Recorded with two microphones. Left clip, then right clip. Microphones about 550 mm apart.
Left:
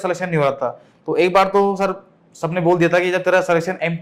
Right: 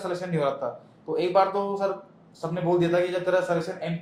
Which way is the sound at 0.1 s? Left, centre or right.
Left.